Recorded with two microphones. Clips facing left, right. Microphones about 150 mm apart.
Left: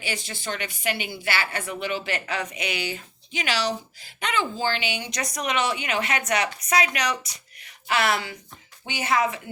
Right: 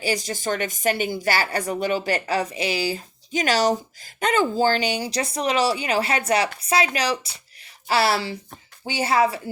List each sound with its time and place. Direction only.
0.0 s speech: 40° right (ahead or behind)